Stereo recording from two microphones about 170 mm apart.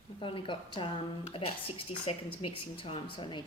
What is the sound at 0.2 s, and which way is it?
A woman's voice, 30° left (ahead or behind).